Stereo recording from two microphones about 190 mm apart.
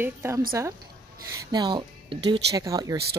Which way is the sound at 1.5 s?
20° right (ahead or behind).